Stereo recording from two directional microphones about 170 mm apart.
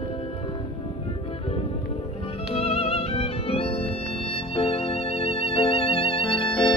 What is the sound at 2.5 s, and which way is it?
Music, 35° left (ahead or behind).